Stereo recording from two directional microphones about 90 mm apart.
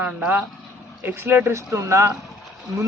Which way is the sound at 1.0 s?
25° right (ahead or behind).